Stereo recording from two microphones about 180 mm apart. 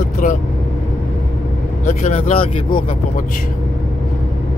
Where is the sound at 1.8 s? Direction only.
40° left (ahead or behind).